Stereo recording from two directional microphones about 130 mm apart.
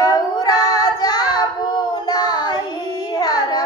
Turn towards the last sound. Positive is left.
turn(degrees=30)  # may be behind; listen again after turning